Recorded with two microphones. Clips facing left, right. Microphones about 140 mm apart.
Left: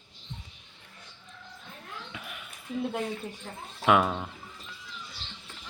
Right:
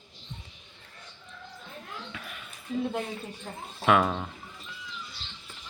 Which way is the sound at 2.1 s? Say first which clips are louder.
Even; 15° left (ahead or behind).